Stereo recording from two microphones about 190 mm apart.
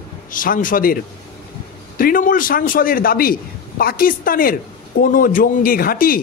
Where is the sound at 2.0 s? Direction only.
45° left (ahead or behind).